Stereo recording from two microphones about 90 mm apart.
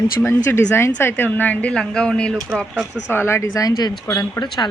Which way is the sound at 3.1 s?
25° left (ahead or behind).